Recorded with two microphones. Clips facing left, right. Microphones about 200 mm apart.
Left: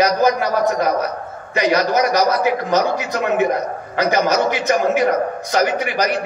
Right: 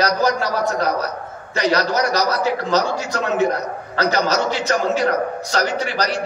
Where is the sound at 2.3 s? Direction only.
15° left (ahead or behind).